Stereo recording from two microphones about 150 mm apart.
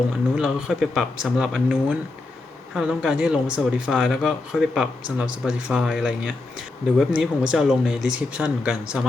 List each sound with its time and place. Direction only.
0.3 s speech: 5° right (ahead or behind)